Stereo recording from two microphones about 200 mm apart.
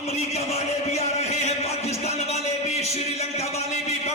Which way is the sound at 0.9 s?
35° left (ahead or behind).